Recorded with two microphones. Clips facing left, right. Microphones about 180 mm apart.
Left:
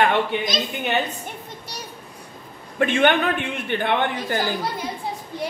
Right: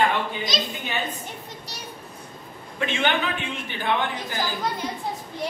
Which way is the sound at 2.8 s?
55° left (ahead or behind).